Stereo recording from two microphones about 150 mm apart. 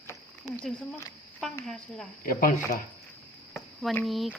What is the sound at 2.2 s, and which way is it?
Speech, 70° left (ahead or behind).